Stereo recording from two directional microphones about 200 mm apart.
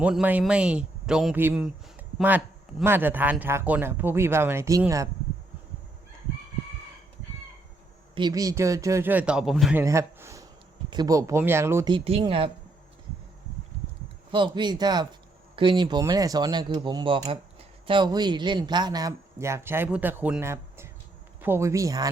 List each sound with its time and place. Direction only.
0.0 s speech: 5° right (ahead or behind)
8.1 s speech: 20° right (ahead or behind); by 9.8 s centre (ahead or behind)
9.8 s speech: 15° right (ahead or behind)
11.9 s speech: 25° right (ahead or behind)
14.3 s speech: 25° right (ahead or behind)